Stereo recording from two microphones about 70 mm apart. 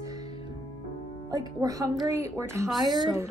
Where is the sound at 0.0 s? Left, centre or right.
Right.